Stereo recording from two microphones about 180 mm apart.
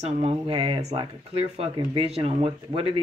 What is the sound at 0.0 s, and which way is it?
Speech, 35° right (ahead or behind).